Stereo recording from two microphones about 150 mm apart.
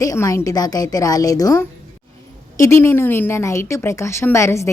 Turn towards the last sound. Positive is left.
turn(degrees=20)  # may be behind; listen again after turning